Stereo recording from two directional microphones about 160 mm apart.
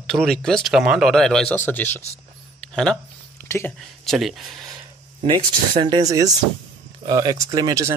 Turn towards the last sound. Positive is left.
turn(degrees=-20)  # may be behind; listen again after turning